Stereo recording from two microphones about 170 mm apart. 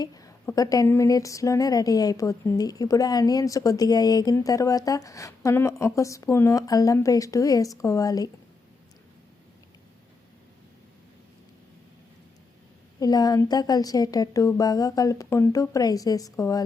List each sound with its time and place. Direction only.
0.0 s a woman's voice: 20° left (ahead or behind)
13.0 s a woman's voice: 25° left (ahead or behind)